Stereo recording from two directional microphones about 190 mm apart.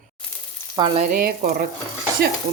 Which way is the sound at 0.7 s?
20° right (ahead or behind).